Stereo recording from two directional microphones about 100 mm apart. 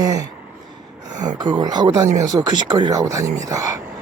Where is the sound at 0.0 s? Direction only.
35° right (ahead or behind).